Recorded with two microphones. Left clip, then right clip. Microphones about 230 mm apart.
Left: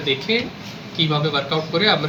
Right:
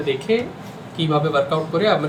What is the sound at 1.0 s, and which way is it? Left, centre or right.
Speech, centre.